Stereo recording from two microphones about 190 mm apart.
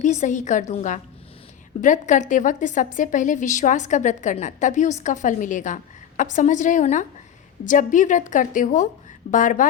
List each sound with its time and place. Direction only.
0.0 s a woman's voice: 40° left (ahead or behind)